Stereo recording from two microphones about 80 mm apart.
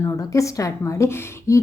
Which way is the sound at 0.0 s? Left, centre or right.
Left.